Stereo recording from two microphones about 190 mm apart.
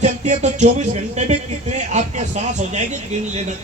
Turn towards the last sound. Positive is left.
turn(degrees=-40)  # may be behind; listen again after turning